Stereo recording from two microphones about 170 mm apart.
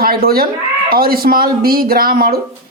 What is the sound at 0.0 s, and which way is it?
Speech, 60° right (ahead or behind).